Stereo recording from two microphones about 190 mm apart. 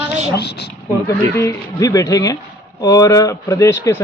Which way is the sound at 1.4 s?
15° left (ahead or behind).